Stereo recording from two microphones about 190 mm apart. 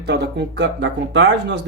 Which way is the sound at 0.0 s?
65° right (ahead or behind).